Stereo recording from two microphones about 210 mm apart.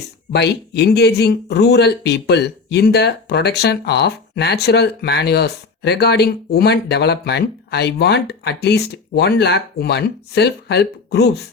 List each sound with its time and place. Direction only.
0.3 s speech: 50° left (ahead or behind)